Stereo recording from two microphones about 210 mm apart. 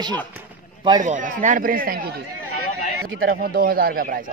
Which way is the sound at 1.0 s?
35° right (ahead or behind).